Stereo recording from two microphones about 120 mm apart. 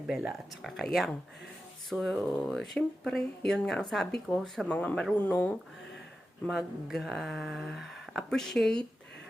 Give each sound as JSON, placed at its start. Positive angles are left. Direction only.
{"t": 0.3, "sound": "speech", "side_deg": 0}
{"t": 6.5, "sound": "speech", "side_deg": 0}